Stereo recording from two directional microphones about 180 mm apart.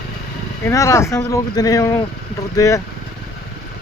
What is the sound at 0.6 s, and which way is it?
Speech, 15° left (ahead or behind).